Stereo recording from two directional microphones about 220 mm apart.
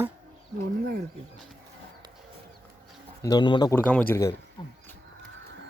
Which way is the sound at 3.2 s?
20° left (ahead or behind).